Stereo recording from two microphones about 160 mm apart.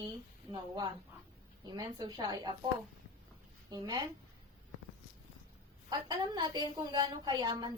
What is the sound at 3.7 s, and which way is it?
Speech, 25° right (ahead or behind).